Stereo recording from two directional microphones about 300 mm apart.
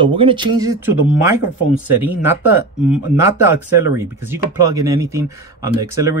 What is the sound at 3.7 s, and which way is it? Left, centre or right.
Speech, centre.